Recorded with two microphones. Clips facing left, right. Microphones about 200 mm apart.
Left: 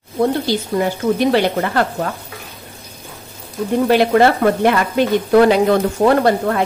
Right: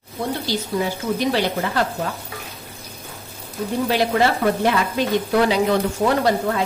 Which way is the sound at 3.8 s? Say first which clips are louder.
Left 7 dB; 55° left (ahead or behind).